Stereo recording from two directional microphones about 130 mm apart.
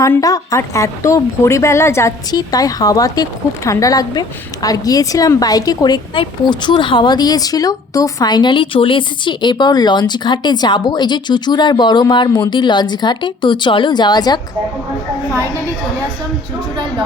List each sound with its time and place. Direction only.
0.0 s speech: 25° left (ahead or behind)